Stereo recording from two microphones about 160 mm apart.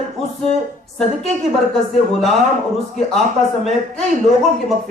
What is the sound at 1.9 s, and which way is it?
Speech, centre (ahead or behind).